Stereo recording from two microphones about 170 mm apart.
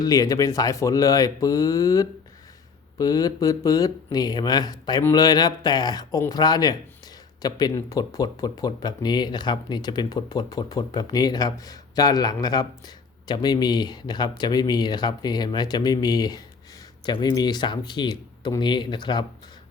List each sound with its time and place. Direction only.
0.0 s speech: 20° left (ahead or behind)